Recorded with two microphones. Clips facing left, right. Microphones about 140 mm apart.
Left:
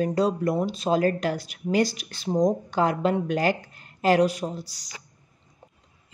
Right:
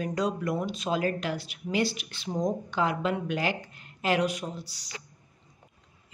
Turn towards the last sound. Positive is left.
turn(degrees=45)  # may be behind; listen again after turning